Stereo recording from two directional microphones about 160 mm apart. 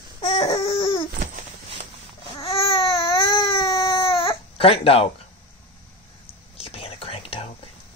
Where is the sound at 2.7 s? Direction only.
20° left (ahead or behind).